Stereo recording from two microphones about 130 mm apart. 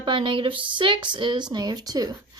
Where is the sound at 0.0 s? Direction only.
40° right (ahead or behind).